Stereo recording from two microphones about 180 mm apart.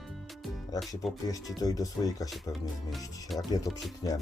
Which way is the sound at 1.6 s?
20° left (ahead or behind).